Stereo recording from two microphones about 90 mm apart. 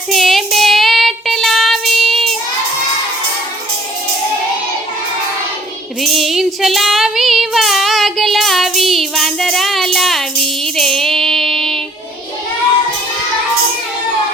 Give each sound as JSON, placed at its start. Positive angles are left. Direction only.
{"t": 0.1, "sound": "child singing", "side_deg": 0}
{"t": 6.0, "sound": "child singing", "side_deg": 0}